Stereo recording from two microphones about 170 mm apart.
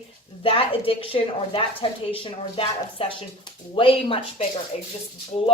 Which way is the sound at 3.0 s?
35° left (ahead or behind).